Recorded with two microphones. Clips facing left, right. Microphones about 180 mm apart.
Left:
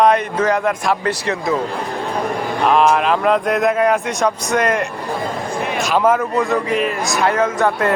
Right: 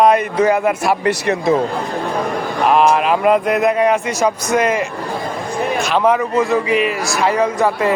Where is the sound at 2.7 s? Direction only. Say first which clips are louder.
Right 1 dB; 5° right (ahead or behind).